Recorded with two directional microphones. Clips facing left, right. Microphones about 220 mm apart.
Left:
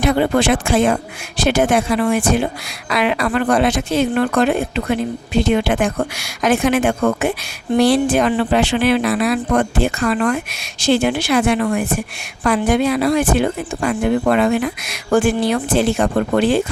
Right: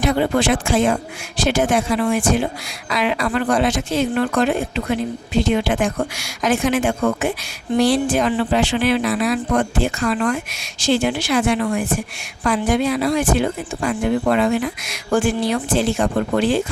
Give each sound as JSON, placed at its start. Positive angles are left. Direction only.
{"t": 0.0, "sound": "speech", "side_deg": 60}